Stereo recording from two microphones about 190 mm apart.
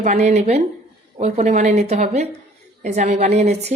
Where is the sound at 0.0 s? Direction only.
40° right (ahead or behind).